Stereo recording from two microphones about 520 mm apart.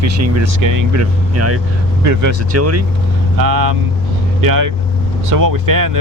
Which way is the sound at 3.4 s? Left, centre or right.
Right.